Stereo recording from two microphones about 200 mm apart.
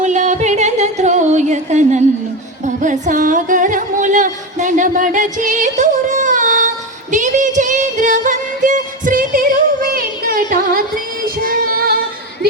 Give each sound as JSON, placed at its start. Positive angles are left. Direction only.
{"t": 0.0, "sound": "music", "side_deg": -35}
{"t": 7.1, "sound": "singing", "side_deg": -40}
{"t": 11.4, "sound": "music", "side_deg": -45}